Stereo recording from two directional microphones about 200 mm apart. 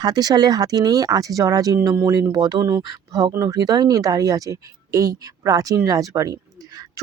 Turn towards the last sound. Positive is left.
turn(degrees=-15)  # may be behind; listen again after turning